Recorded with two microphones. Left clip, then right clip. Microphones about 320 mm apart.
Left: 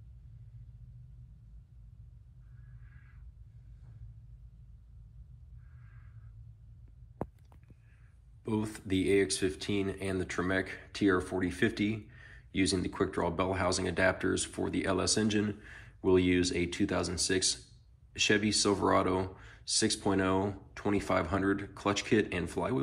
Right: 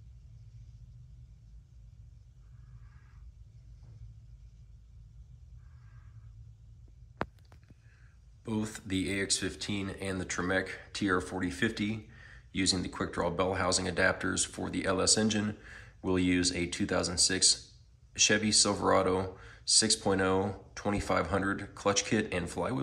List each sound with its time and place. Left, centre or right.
8.5 s speech: centre